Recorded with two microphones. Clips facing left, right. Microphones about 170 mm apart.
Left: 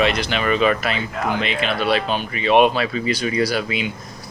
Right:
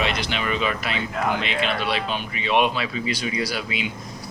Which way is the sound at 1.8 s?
50° left (ahead or behind).